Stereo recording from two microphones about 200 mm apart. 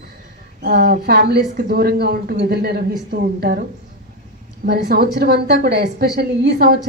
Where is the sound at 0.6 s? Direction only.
50° right (ahead or behind).